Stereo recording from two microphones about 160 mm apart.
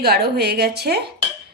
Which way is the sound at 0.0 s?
80° right.